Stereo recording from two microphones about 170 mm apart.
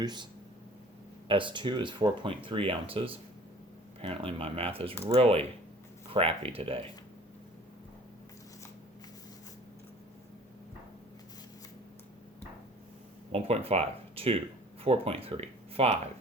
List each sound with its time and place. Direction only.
0.0 s speech: 25° right (ahead or behind)
1.3 s speech: 30° right (ahead or behind)
13.3 s speech: 35° right (ahead or behind)